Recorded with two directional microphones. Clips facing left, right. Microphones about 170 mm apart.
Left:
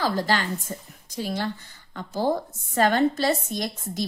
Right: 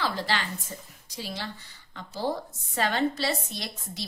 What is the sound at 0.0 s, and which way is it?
A woman's voice, 45° left (ahead or behind).